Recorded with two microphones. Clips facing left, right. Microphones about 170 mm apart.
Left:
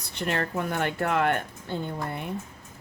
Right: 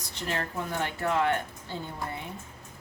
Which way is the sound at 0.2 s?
60° left (ahead or behind).